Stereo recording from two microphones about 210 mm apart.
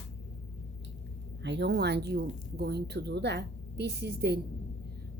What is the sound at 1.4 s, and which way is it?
A woman's voice, 55° right (ahead or behind).